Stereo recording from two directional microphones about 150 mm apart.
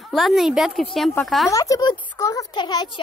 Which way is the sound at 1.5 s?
20° left (ahead or behind).